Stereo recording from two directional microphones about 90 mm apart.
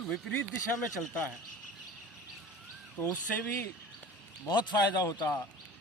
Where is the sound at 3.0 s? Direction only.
20° left (ahead or behind).